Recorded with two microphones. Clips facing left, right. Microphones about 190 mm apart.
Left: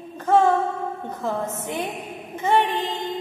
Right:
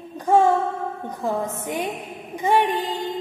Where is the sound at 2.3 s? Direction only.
15° right (ahead or behind).